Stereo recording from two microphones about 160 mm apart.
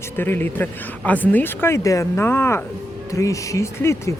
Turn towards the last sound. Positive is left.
turn(degrees=15)  # may be behind; listen again after turning